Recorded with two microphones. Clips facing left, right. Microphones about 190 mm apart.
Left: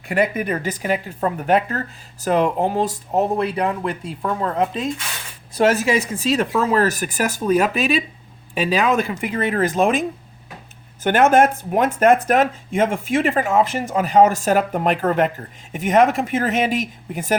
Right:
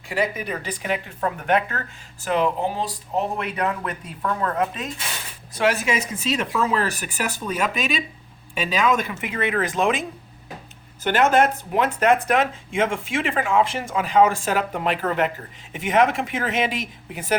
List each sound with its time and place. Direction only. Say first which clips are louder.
0.1 s speech: left 5 dB; 55° left (ahead or behind); by 1.8 s 35° left (ahead or behind)
2.2 s speech: left 4 dB; 45° left (ahead or behind)
3.3 s speech: left 5 dB; 30° left (ahead or behind)
11.0 s speech: left 4 dB; 50° left (ahead or behind)